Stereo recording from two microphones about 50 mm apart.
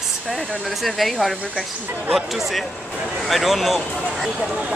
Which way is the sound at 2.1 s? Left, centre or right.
Centre.